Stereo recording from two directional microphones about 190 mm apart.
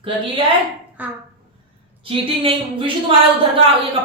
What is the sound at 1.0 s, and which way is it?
Speech, 10° right (ahead or behind).